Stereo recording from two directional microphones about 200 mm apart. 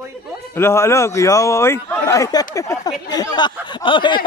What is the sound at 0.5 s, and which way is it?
A man's voice, 10° left (ahead or behind).